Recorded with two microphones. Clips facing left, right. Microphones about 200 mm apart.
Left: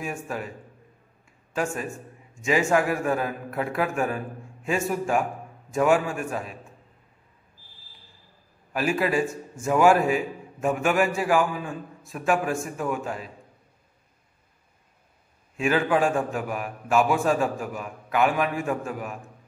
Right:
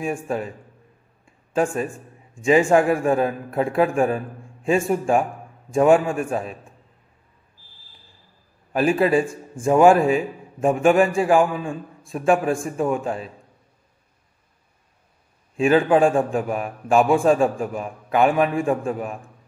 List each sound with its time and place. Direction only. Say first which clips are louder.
0.0 s a man's voice: right 6 dB; 30° right (ahead or behind)
2.4 s a man's voice: right 6 dB; 30° right (ahead or behind)
8.7 s a man's voice: right 6 dB; 25° right (ahead or behind)
15.5 s a man's voice: right 6 dB; 30° right (ahead or behind)